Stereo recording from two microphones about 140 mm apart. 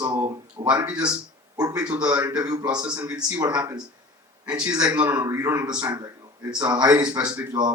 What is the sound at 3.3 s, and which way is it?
Speech, 30° right (ahead or behind).